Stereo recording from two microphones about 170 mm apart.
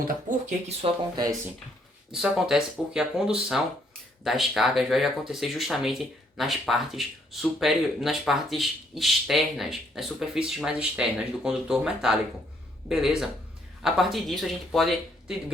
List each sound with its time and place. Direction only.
0.3 s speech: 40° right (ahead or behind)
1.2 s speech: 20° right (ahead or behind)
2.1 s speech: 5° right (ahead or behind)